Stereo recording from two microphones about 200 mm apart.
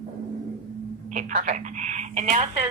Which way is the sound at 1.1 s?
40° right (ahead or behind).